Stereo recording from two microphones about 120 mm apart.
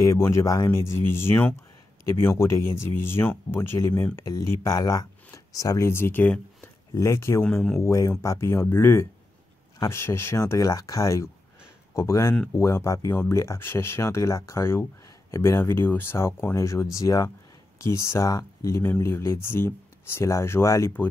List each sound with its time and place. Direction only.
0.0 s speech: 25° left (ahead or behind)